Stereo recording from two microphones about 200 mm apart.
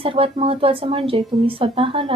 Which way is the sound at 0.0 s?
25° right (ahead or behind).